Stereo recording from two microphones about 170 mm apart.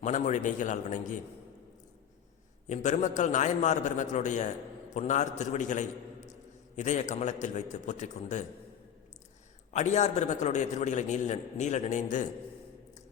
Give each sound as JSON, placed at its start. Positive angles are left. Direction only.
{"t": 0.0, "sound": "a man's voice", "side_deg": 45}
{"t": 2.6, "sound": "a man's voice", "side_deg": 45}
{"t": 9.7, "sound": "a man's voice", "side_deg": 45}